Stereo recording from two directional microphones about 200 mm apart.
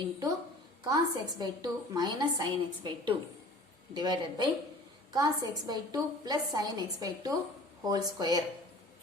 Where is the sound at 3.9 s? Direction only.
20° right (ahead or behind).